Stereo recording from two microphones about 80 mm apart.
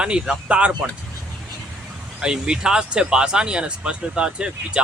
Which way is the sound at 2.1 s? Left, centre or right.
Centre.